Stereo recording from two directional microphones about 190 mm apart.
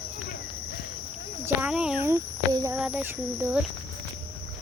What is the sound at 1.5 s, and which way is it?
Speech, 5° right (ahead or behind).